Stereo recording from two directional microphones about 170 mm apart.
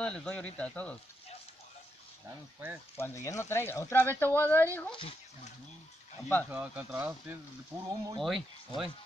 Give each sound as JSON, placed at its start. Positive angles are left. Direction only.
{"t": 0.0, "sound": "speech", "side_deg": 5}
{"t": 2.2, "sound": "speech", "side_deg": -10}
{"t": 3.0, "sound": "speech", "side_deg": 15}
{"t": 4.9, "sound": "speech", "side_deg": 35}
{"t": 6.5, "sound": "speech", "side_deg": -10}
{"t": 8.2, "sound": "speech", "side_deg": 0}